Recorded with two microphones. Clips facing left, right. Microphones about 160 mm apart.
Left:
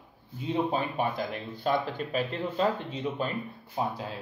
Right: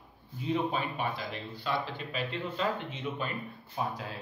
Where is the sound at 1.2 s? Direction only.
50° left (ahead or behind).